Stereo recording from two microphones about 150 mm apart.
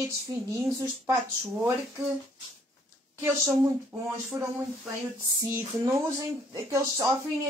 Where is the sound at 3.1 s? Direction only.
15° right (ahead or behind).